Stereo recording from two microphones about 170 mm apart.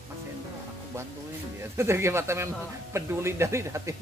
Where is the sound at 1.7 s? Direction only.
15° right (ahead or behind).